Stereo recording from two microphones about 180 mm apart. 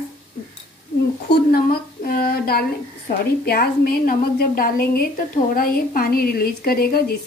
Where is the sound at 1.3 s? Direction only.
55° left (ahead or behind).